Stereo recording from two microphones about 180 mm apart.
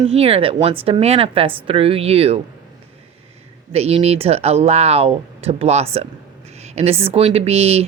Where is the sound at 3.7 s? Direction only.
35° right (ahead or behind).